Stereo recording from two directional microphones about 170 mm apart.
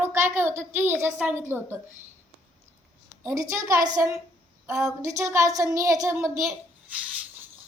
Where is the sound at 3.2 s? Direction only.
20° right (ahead or behind).